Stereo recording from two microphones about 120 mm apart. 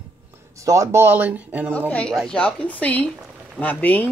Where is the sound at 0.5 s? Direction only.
25° right (ahead or behind).